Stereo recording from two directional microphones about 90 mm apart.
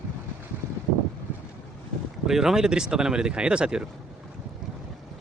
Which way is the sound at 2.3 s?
5° right (ahead or behind).